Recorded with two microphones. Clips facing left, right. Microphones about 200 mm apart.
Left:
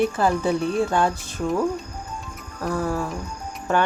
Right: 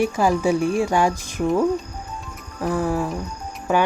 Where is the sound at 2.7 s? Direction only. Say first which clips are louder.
Right 3 dB; 15° right (ahead or behind).